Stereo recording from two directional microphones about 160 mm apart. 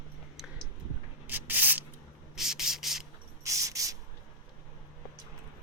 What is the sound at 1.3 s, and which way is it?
Spray, 10° right (ahead or behind).